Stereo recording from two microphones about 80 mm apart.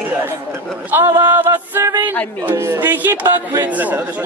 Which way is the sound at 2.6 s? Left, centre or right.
Right.